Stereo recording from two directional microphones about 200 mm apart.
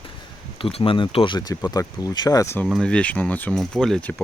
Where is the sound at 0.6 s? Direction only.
25° left (ahead or behind).